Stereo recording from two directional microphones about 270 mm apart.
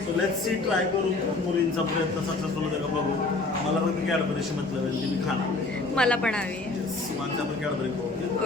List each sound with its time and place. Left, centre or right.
6.0 s a woman's voice: centre